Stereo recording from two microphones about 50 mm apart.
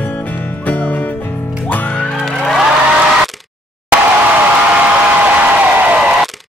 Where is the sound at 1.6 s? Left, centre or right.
Left.